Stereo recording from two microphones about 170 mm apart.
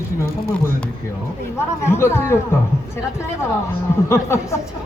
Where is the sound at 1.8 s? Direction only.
15° left (ahead or behind).